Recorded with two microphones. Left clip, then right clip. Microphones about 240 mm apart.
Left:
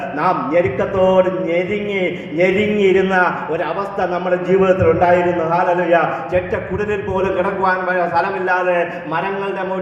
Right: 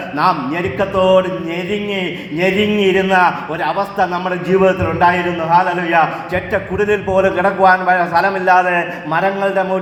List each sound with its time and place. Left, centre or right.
0.8 s a man's voice: right
2.4 s a man's voice: right